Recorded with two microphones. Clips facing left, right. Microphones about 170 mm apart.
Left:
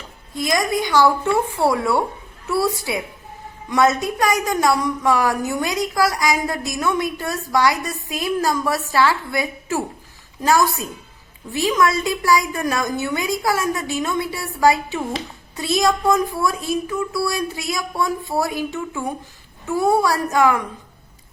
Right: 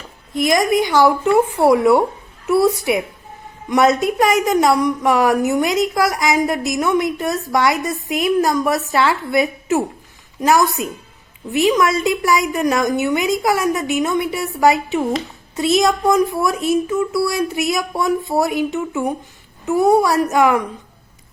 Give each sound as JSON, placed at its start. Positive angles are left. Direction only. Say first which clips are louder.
{"t": 0.3, "sound": "a woman's voice", "louder": "right 5 dB", "side_deg": -20}